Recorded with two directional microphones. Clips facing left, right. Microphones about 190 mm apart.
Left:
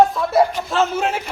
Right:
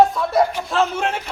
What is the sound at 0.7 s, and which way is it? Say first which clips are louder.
Speech: left 1 dB; centre (ahead or behind).